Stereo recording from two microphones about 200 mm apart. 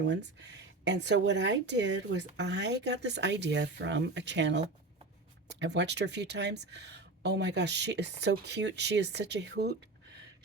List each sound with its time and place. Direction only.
0.0 s speech: 60° right (ahead or behind)